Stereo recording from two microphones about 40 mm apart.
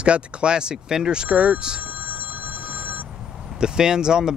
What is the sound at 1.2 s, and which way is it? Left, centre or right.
Speech, right.